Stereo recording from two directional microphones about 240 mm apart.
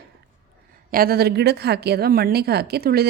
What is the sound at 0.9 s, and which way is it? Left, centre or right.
A woman's voice, right.